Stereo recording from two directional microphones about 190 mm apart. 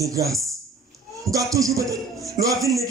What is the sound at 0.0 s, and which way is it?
A man's voice, 15° right (ahead or behind).